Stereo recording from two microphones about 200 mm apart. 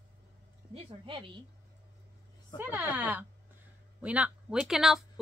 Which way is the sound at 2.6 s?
10° right (ahead or behind).